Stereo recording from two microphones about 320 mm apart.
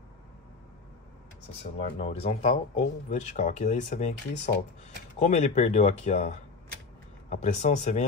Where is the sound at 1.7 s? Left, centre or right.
Left.